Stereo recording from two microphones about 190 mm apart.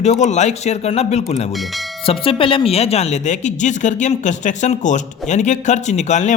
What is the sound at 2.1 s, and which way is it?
Speech, 30° left (ahead or behind).